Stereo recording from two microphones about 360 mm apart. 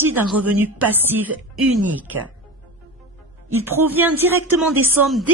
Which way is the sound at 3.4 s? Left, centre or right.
Centre.